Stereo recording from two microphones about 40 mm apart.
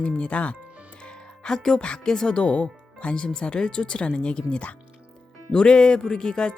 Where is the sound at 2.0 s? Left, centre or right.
Centre.